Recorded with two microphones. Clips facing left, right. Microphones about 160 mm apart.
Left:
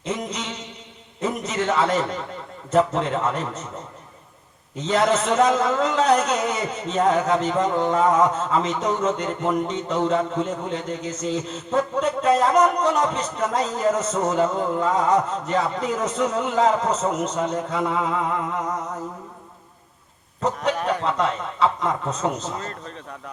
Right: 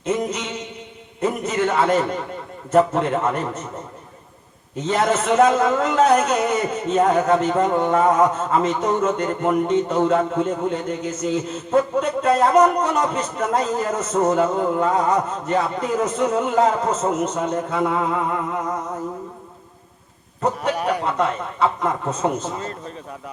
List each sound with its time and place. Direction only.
0.0 s a sound: 50° right (ahead or behind)
1.2 s a man's voice: 55° right (ahead or behind)
4.8 s a man's voice: 50° right (ahead or behind)
20.6 s speech: 10° right (ahead or behind)
21.0 s a man's voice: 50° right (ahead or behind)